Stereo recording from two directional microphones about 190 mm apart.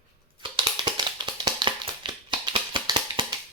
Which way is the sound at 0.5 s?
25° right (ahead or behind).